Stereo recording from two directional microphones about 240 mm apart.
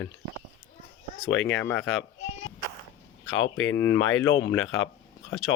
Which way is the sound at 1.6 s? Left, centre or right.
Centre.